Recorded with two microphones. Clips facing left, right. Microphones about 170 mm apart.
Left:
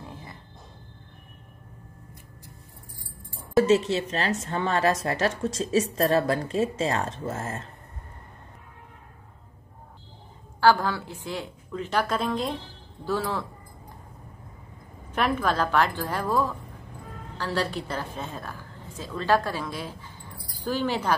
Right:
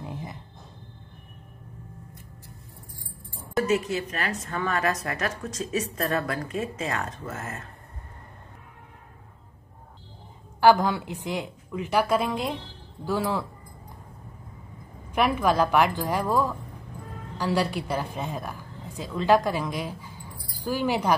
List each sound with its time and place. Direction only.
0.0 s a sound: 20° right (ahead or behind)
3.5 s a woman's voice: 25° left (ahead or behind)
10.6 s a woman's voice: 15° right (ahead or behind)
15.1 s a woman's voice: 10° right (ahead or behind)